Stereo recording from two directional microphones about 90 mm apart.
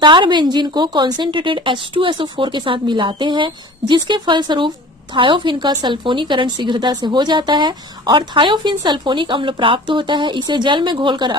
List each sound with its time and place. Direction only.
0.0 s a woman's voice: 65° right (ahead or behind)
1.3 s a woman's voice: 70° right (ahead or behind)